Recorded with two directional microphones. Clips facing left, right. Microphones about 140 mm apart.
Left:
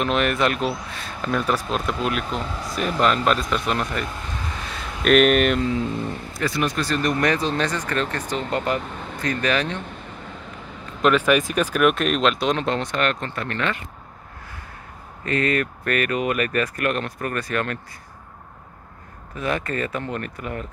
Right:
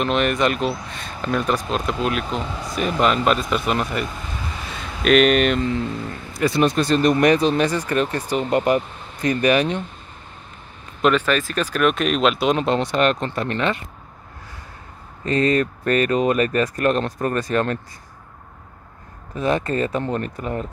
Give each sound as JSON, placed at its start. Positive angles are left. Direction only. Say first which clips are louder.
{"t": 0.0, "sound": "speech", "louder": "right 1 dB", "side_deg": 0}
{"t": 6.4, "sound": "speech", "louder": "right 6 dB", "side_deg": -25}
{"t": 11.0, "sound": "speech", "louder": "right 1 dB", "side_deg": 0}
{"t": 11.2, "sound": "speech", "louder": "left 2 dB", "side_deg": 15}
{"t": 12.7, "sound": "speech", "louder": "right 5 dB", "side_deg": -20}
{"t": 15.2, "sound": "speech", "louder": "right 4 dB", "side_deg": -25}
{"t": 19.3, "sound": "speech", "louder": "right 4 dB", "side_deg": -25}